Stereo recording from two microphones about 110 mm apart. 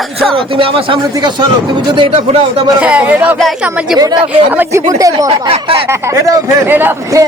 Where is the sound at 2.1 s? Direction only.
65° right (ahead or behind).